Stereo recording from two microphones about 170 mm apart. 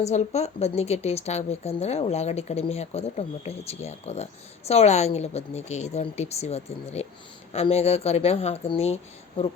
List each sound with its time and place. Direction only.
0.0 s speech: 40° left (ahead or behind)